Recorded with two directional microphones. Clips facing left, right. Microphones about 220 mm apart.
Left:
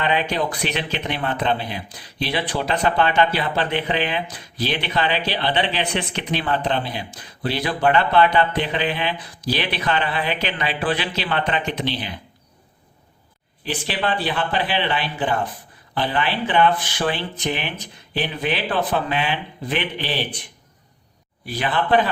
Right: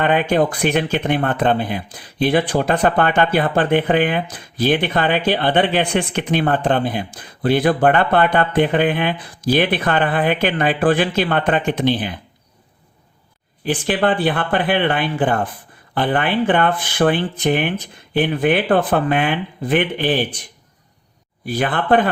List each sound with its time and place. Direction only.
0.0 s speech: 50° right (ahead or behind)
13.7 s speech: 50° right (ahead or behind)
21.4 s speech: 50° right (ahead or behind)